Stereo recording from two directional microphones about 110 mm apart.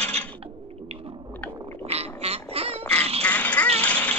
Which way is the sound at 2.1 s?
70° right (ahead or behind).